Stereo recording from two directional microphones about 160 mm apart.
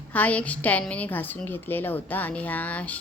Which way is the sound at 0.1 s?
10° left (ahead or behind).